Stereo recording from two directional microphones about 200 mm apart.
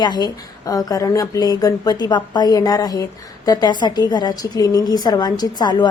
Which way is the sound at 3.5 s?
20° left (ahead or behind).